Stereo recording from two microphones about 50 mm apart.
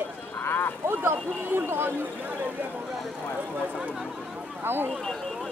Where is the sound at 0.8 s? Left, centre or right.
Right.